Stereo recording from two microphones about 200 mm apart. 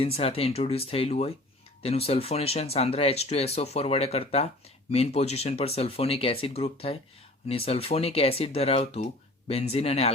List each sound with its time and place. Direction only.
0.0 s speech: 30° left (ahead or behind)